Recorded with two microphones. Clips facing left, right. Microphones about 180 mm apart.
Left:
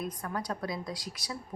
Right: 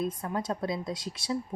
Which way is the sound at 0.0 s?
25° right (ahead or behind).